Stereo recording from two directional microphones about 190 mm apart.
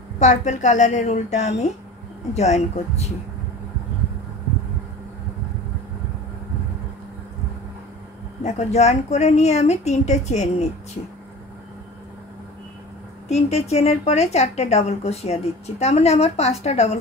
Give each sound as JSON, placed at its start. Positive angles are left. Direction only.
{"t": 0.2, "sound": "a woman's voice", "side_deg": 40}
{"t": 8.5, "sound": "a woman's voice", "side_deg": 35}
{"t": 13.3, "sound": "a woman's voice", "side_deg": 35}